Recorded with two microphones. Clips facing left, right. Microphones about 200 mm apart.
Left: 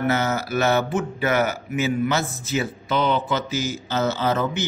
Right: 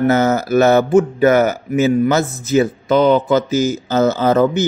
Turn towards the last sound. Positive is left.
turn(degrees=-45)  # may be behind; listen again after turning